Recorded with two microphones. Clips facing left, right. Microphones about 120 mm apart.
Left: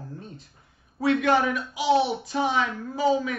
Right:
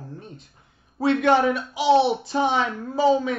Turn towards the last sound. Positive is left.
turn(degrees=-30)  # may be behind; listen again after turning